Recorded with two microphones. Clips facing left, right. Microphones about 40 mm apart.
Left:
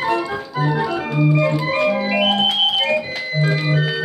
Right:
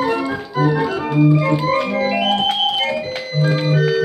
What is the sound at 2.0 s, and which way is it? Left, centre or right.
Organ, centre.